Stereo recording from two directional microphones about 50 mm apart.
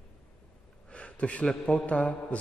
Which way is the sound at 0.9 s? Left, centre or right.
Left.